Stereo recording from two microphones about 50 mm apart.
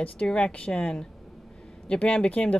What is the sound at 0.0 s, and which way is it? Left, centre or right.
Speech, left.